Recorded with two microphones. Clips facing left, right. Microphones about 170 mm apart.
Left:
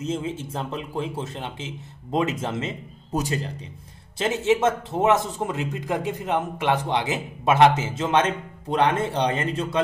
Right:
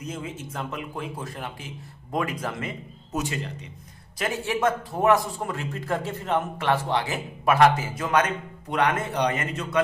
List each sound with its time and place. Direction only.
0.0 s a man's voice: 30° left (ahead or behind)
3.2 s speech: 35° left (ahead or behind)
4.2 s a man's voice: 25° left (ahead or behind)